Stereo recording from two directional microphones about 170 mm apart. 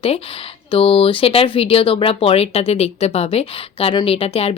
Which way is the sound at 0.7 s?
35° left (ahead or behind).